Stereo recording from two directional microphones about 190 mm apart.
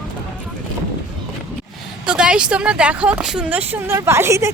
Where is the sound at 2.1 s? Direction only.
5° right (ahead or behind).